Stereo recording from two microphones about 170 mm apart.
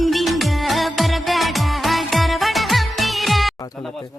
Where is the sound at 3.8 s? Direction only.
Centre (ahead or behind).